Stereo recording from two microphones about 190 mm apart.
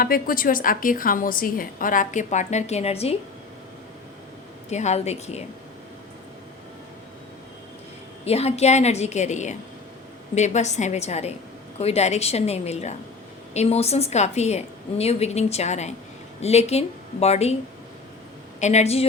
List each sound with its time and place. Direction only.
0.0 s a woman's voice: 50° left (ahead or behind); by 3.2 s 30° left (ahead or behind)
4.7 s a woman's voice: 35° left (ahead or behind)
8.2 s a woman's voice: 35° left (ahead or behind)
18.6 s a woman's voice: 35° left (ahead or behind)